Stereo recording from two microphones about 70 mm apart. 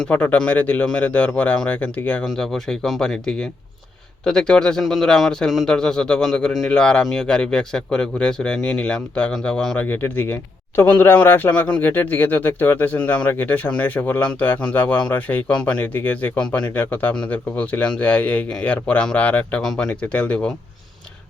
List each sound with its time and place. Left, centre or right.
0.0 s a man's voice: left
2.2 s speech: centre
9.7 s a man's voice: left
19.6 s speech: centre
19.9 s a man's voice: centre